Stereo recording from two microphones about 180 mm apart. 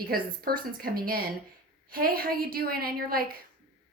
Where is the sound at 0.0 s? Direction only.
55° right (ahead or behind).